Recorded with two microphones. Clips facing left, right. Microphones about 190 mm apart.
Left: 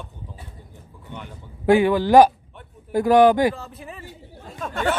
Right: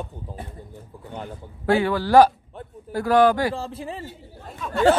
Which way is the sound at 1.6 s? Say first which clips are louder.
Left 4 dB; 15° left (ahead or behind).